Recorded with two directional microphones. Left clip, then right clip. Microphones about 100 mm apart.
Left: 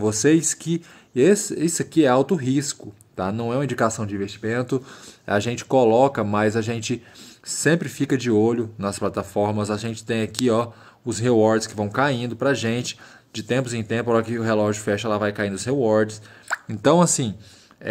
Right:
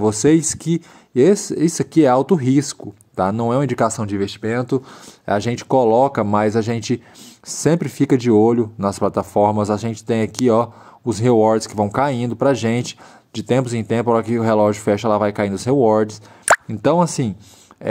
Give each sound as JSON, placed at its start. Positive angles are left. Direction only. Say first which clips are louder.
{"t": 0.0, "sound": "speech", "louder": "right 4 dB", "side_deg": -35}
{"t": 3.6, "sound": "speech", "louder": "right 4 dB", "side_deg": -35}
{"t": 4.3, "sound": "speech", "louder": "right 4 dB", "side_deg": -20}
{"t": 5.2, "sound": "speech", "louder": "right 3 dB", "side_deg": -35}
{"t": 16.6, "sound": "speech", "louder": "right 1 dB", "side_deg": -15}